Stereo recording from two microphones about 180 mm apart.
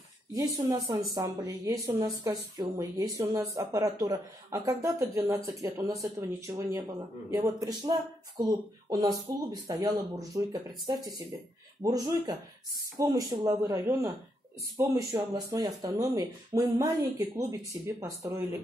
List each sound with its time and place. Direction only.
0.3 s speech: 20° right (ahead or behind)
11.8 s speech: 20° right (ahead or behind)